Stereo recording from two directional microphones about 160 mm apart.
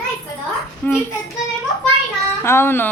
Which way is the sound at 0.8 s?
15° left (ahead or behind).